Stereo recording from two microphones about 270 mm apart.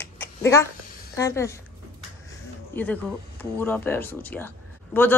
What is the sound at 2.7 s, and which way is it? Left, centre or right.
Speech, centre.